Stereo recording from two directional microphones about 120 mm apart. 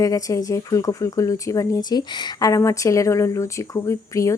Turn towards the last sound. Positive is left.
turn(degrees=25)  # may be behind; listen again after turning